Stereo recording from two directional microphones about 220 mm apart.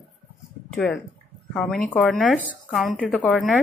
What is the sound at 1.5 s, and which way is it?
A woman's voice, 5° left (ahead or behind).